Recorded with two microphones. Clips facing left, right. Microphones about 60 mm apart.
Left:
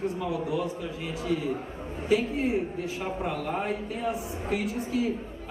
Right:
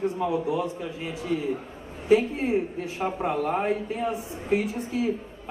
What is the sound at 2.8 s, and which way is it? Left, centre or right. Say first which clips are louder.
A woman's voice: right 3 dB; right.